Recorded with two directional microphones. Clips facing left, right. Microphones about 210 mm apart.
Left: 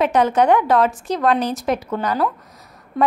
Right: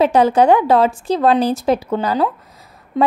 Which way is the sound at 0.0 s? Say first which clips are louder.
Right 4 dB; 30° right (ahead or behind).